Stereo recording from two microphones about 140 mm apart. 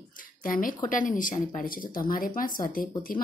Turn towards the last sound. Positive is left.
turn(degrees=90)